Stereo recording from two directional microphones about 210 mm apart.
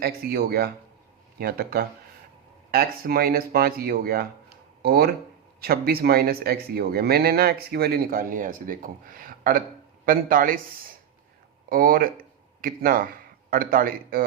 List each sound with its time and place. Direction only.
0.0 s speech: 45° right (ahead or behind)
11.7 s a man's voice: 45° right (ahead or behind)